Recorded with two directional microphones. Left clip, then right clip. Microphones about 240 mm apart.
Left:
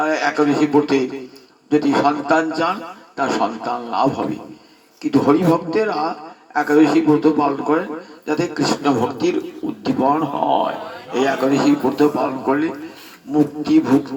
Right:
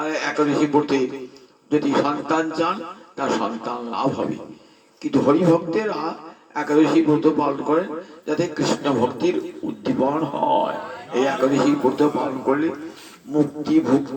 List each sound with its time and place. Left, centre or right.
0.0 s a man's voice: left